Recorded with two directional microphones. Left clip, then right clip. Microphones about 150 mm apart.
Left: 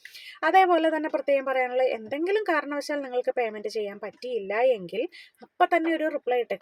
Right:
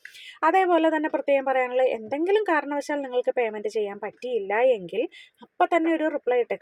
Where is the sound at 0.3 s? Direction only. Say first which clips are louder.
Even; 25° right (ahead or behind).